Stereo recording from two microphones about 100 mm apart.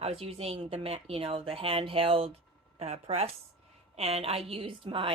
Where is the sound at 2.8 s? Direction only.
90° right; by 5.1 s 60° right (ahead or behind).